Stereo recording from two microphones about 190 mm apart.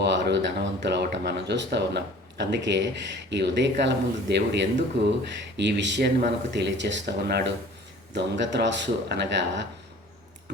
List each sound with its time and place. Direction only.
0.0 s speech: 65° right (ahead or behind)